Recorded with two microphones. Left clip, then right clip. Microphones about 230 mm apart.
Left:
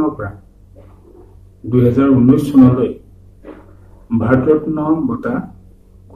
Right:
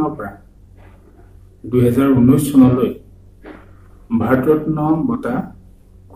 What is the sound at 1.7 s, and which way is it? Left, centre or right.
Speech, centre.